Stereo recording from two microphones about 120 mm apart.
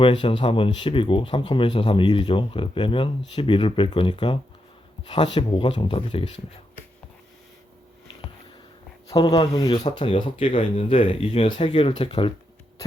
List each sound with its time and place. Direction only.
0.0 s speech: 45° left (ahead or behind)
9.1 s speech: 35° left (ahead or behind)